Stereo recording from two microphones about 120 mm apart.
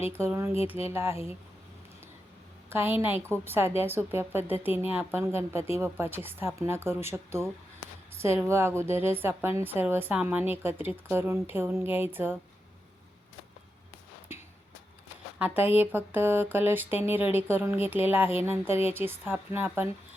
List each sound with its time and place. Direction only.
0.0 s speech: 20° right (ahead or behind)
2.6 s a woman's voice: 20° right (ahead or behind)
15.4 s speech: 15° right (ahead or behind)